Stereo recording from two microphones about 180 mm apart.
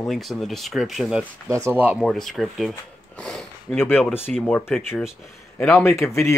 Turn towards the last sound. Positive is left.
turn(degrees=15)  # may be behind; listen again after turning